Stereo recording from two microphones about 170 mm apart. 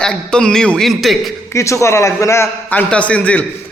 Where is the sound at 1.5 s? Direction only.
15° left (ahead or behind).